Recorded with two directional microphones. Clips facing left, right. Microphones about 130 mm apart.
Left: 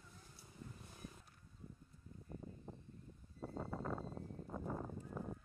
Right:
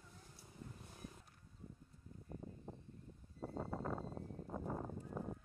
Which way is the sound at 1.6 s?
35° right (ahead or behind).